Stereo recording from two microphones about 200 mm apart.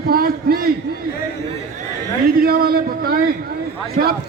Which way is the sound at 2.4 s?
50° right (ahead or behind).